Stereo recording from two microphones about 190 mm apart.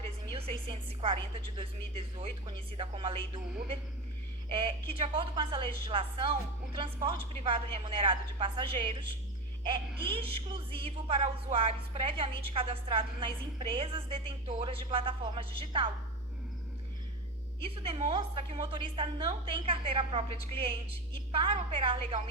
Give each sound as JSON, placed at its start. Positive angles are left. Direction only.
{"t": 0.3, "sound": "speech", "side_deg": -30}
{"t": 17.8, "sound": "speech", "side_deg": -25}